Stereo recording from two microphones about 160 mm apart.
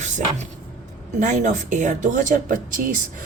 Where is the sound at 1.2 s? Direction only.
50° right (ahead or behind).